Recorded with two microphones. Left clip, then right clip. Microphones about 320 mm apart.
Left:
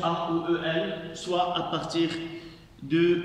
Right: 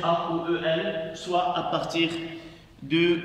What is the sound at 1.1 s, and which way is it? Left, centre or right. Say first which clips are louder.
A man's voice: right 1 dB; centre.